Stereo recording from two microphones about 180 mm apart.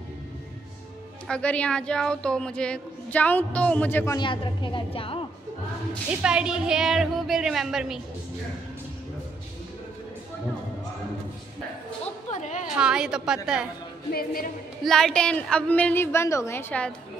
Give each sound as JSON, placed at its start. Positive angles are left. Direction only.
{"t": 1.2, "sound": "a woman's voice", "side_deg": 5}
{"t": 4.2, "sound": "a woman's voice", "side_deg": 25}
{"t": 6.2, "sound": "a woman's voice", "side_deg": -5}
{"t": 12.3, "sound": "a sound", "side_deg": 40}
{"t": 12.7, "sound": "a woman's voice", "side_deg": -5}
{"t": 14.1, "sound": "music", "side_deg": 55}
{"t": 14.8, "sound": "a woman's voice", "side_deg": 0}